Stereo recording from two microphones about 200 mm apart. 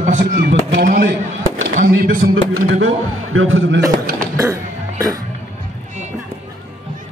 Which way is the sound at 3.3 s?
85° right.